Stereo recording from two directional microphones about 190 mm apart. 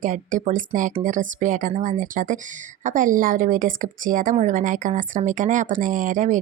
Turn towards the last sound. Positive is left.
turn(degrees=-40)  # may be behind; listen again after turning